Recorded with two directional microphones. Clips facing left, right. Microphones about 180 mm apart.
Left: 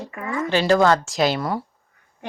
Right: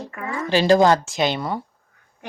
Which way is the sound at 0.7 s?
20° right (ahead or behind).